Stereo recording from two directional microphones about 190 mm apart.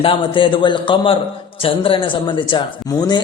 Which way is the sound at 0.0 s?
25° left (ahead or behind).